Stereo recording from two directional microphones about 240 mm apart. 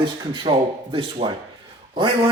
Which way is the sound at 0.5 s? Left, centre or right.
Centre.